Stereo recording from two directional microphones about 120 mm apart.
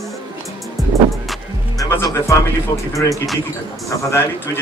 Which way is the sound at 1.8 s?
30° left (ahead or behind).